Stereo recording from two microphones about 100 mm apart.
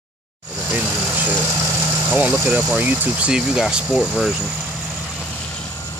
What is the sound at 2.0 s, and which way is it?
Speech, 15° right (ahead or behind).